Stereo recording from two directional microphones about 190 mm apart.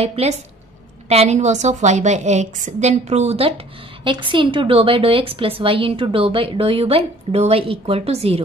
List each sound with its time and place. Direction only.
0.0 s a woman's voice: 30° right (ahead or behind)